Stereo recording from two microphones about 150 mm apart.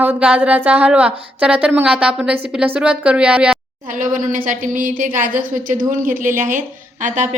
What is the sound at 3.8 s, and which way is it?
A woman's voice, 60° right (ahead or behind).